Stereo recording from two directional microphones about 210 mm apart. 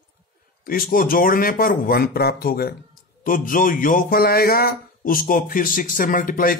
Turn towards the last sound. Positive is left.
turn(degrees=40)  # may be behind; listen again after turning